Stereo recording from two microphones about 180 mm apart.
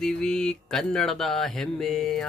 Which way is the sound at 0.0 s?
5° left (ahead or behind).